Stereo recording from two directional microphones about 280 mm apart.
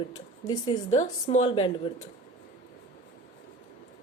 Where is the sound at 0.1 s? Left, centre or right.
Centre.